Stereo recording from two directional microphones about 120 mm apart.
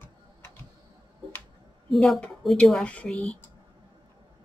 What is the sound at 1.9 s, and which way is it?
Speech, centre (ahead or behind).